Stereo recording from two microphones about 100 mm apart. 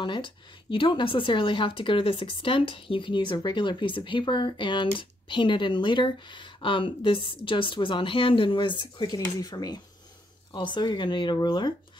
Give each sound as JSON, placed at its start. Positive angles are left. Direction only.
{"t": 0.0, "sound": "speech", "side_deg": 55}